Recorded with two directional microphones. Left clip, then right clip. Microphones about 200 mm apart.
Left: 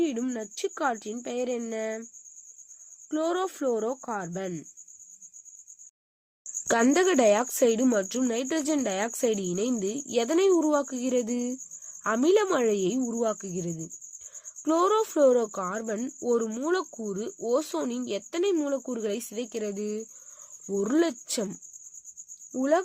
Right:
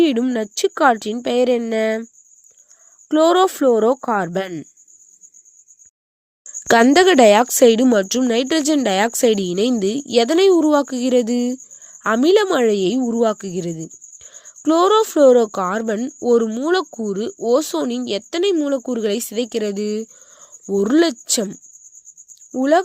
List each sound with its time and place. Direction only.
0.0 s speech: 40° right (ahead or behind)
3.1 s speech: 45° right (ahead or behind)
6.7 s speech: 30° right (ahead or behind)